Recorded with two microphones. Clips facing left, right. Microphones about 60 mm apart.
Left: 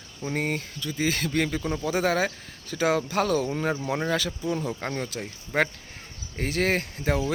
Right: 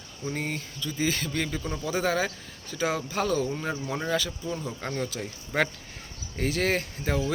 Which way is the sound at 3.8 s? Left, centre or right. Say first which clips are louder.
Left 3 dB; left.